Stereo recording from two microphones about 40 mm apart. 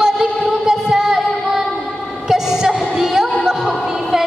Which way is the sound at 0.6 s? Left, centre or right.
Centre.